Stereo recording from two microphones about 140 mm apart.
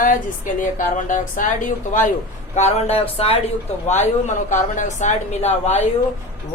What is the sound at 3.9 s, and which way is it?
A woman's voice, 60° left (ahead or behind).